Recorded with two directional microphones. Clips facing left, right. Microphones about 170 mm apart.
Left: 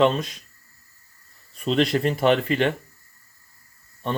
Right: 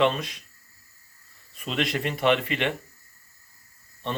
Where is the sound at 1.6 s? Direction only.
35° left (ahead or behind).